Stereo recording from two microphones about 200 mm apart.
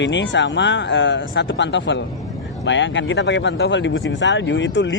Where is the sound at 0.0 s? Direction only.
65° left (ahead or behind).